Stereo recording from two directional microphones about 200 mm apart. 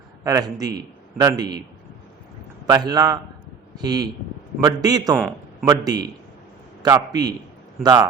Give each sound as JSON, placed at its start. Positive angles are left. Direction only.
{"t": 0.3, "sound": "a man's voice", "side_deg": -15}
{"t": 2.6, "sound": "a man's voice", "side_deg": -20}
{"t": 5.1, "sound": "a sound", "side_deg": -5}
{"t": 5.6, "sound": "a man's voice", "side_deg": -20}